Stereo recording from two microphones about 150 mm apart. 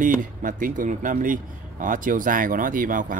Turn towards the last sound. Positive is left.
turn(degrees=-65)  # may be behind; listen again after turning